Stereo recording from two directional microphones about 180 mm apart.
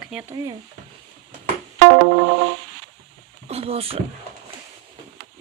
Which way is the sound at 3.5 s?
35° right (ahead or behind).